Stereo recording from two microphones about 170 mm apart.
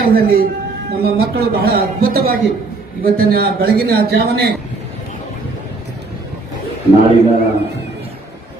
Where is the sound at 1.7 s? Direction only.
60° right (ahead or behind).